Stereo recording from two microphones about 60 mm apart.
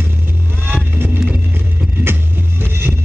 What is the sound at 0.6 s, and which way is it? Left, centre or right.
Vehicle, right.